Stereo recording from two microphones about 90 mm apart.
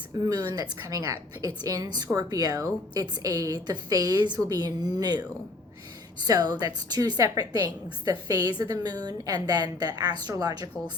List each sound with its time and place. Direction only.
0.3 s a woman's voice: 40° right (ahead or behind)
6.2 s a woman's voice: 45° right (ahead or behind)